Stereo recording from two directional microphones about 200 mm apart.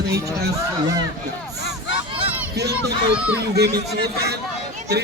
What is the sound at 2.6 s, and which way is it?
Speech, 55° right (ahead or behind).